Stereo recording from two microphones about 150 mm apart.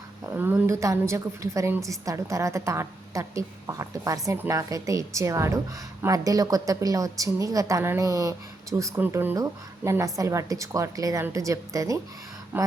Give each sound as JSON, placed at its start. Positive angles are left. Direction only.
{"t": 0.3, "sound": "a woman's voice", "side_deg": -15}